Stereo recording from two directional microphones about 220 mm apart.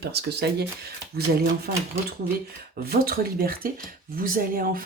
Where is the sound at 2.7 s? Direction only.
45° right (ahead or behind).